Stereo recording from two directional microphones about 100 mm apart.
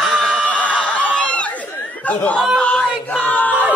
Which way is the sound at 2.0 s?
15° left (ahead or behind).